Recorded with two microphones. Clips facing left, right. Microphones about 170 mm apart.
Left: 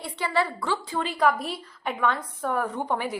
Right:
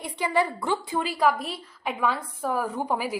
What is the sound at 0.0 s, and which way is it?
A woman's voice, 15° right (ahead or behind).